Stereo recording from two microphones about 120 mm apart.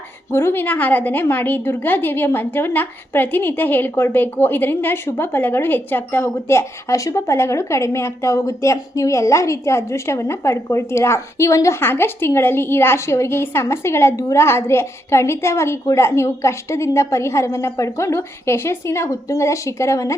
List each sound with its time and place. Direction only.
0.3 s a woman's voice: 20° left (ahead or behind)